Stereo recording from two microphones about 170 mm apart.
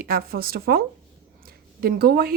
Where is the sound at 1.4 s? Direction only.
60° right (ahead or behind).